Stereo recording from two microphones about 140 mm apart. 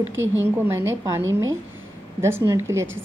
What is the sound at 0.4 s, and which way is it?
Speech, 15° right (ahead or behind).